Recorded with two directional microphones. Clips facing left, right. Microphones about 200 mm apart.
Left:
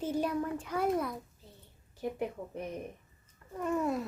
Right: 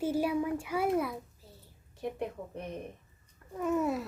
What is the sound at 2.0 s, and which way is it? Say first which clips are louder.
A child's voice: left 1 dB; centre (ahead or behind).